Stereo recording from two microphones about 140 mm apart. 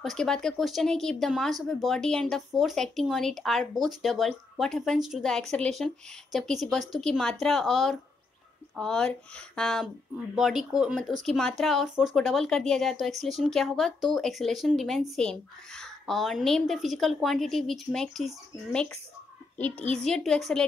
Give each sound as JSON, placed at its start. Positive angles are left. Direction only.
{"t": 0.0, "sound": "speech", "side_deg": 0}